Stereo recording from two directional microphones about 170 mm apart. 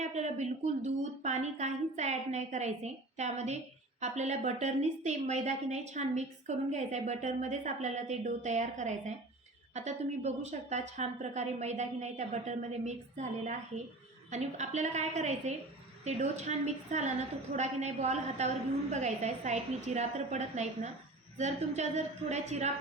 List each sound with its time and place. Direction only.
0.0 s a woman's voice: 40° right (ahead or behind)